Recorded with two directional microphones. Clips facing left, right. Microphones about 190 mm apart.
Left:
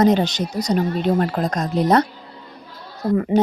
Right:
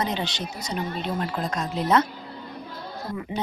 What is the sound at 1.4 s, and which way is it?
Speech, 40° left (ahead or behind).